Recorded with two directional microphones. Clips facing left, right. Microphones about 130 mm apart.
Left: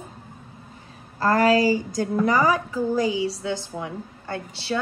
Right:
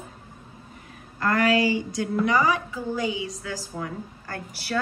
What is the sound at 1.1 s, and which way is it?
A woman's voice, 35° left (ahead or behind).